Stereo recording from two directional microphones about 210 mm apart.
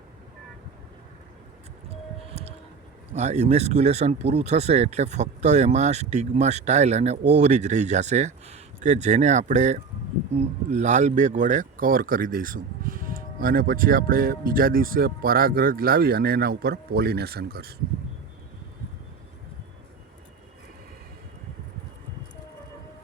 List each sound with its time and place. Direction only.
3.2 s speech: 30° right (ahead or behind); by 17.7 s 50° right (ahead or behind)